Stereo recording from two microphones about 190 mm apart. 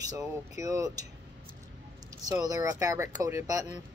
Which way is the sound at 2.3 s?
20° right (ahead or behind).